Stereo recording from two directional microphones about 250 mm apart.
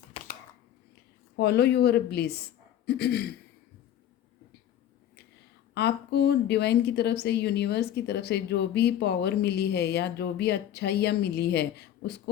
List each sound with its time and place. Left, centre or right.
0.1 s a sound: left
1.4 s a woman's voice: left
5.7 s a woman's voice: left